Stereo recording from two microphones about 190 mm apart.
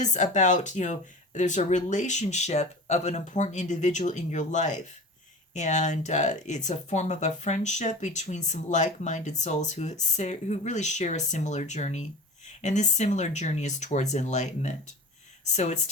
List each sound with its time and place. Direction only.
0.0 s speech: 40° left (ahead or behind)